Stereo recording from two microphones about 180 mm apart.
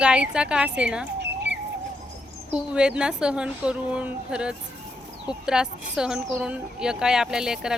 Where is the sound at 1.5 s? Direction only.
75° right (ahead or behind).